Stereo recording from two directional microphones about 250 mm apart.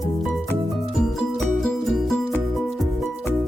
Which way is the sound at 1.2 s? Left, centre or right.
Centre.